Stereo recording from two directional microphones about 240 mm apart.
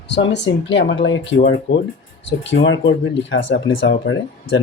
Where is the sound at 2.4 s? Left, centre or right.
Left.